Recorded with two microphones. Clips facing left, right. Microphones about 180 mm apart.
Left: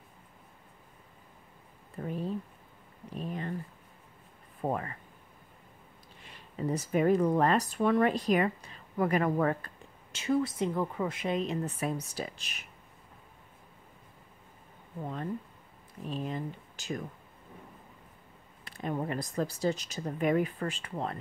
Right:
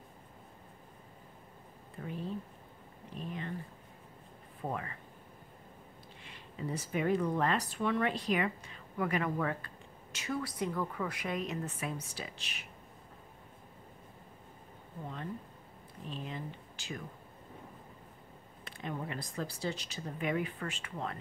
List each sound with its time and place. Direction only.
2.0 s speech: 45° left (ahead or behind)
3.2 s a sound: 40° left (ahead or behind)
4.6 s speech: 40° left (ahead or behind)
6.6 s speech: 40° left (ahead or behind)
10.1 s a woman's voice: 25° left (ahead or behind); by 12.6 s 45° left (ahead or behind)
16.1 s speech: 45° left (ahead or behind)
18.8 s speech: 45° left (ahead or behind)